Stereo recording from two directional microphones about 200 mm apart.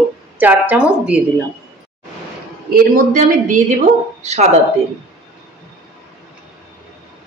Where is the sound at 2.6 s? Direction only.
45° right (ahead or behind).